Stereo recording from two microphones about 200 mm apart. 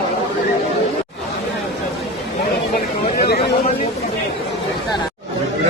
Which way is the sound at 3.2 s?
50° left (ahead or behind).